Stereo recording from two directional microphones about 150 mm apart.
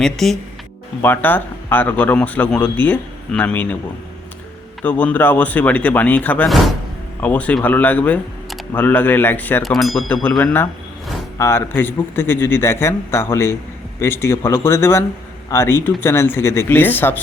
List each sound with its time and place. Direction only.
0.0 s speech: centre (ahead or behind)
1.0 s a man's voice: 15° left (ahead or behind)
4.8 s a man's voice: 10° left (ahead or behind)
9.6 s speech: centre (ahead or behind)
10.4 s a man's voice: 15° left (ahead or behind)